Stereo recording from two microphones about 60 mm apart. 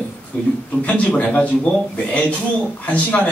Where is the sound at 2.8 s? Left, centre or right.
Left.